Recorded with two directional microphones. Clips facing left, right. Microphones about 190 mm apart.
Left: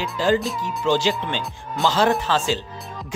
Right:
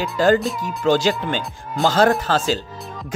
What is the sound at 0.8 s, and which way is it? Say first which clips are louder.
Speech: right 3 dB; 40° right (ahead or behind).